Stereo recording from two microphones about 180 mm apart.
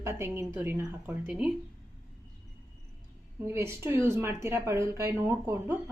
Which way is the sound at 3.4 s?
15° right (ahead or behind).